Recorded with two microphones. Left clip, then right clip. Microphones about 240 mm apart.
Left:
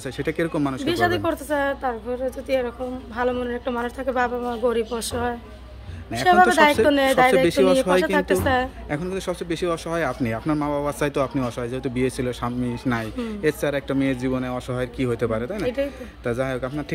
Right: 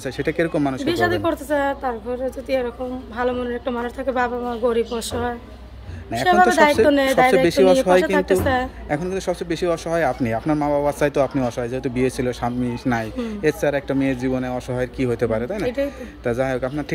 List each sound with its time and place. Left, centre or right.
0.0 s a man's voice: centre